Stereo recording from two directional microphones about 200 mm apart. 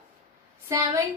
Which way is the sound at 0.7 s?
15° right (ahead or behind).